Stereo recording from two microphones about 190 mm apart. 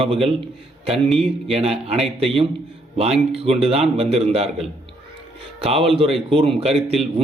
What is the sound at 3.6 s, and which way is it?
A man's voice, 30° right (ahead or behind).